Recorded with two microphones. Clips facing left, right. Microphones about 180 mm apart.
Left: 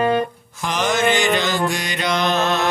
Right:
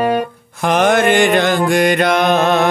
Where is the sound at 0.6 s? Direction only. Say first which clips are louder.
Right 7 dB; 60° right (ahead or behind).